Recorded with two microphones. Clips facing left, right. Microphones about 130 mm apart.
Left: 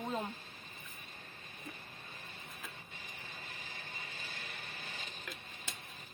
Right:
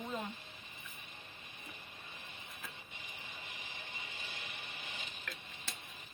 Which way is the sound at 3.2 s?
20° right (ahead or behind).